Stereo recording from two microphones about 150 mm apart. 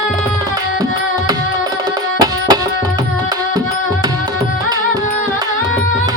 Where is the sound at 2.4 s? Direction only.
25° right (ahead or behind).